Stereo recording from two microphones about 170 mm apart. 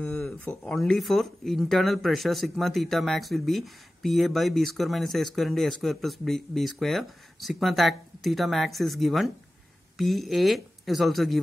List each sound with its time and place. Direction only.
0.0 s speech: 5° left (ahead or behind)